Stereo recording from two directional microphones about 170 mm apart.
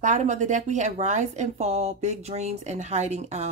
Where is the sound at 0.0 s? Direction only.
45° right (ahead or behind).